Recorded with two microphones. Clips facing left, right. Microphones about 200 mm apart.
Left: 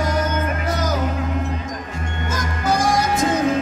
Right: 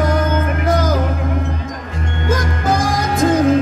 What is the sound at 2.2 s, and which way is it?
Music, 55° right (ahead or behind).